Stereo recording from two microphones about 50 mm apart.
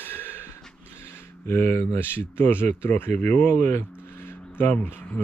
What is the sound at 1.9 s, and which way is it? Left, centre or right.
Speech, left.